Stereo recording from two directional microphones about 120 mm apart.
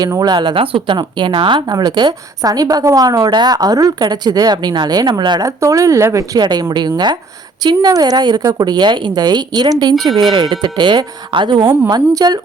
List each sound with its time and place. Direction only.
0.0 s a woman's voice: 35° right (ahead or behind)
0.5 s speech: 50° right (ahead or behind)
1.5 s a woman's voice: 35° right (ahead or behind)